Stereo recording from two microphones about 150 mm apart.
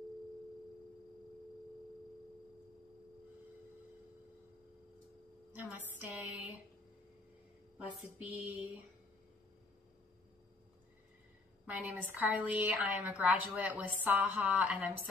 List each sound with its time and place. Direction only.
5.5 s a sound: 10° right (ahead or behind)
7.7 s a woman's voice: 10° right (ahead or behind)
11.6 s a woman's voice: 10° right (ahead or behind)